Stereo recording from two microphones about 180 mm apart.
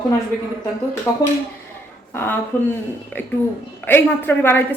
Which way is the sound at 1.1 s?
15° left (ahead or behind).